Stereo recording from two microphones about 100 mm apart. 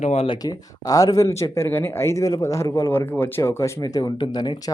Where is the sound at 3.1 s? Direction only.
20° left (ahead or behind).